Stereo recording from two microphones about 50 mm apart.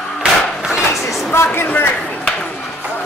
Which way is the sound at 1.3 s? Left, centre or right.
Left.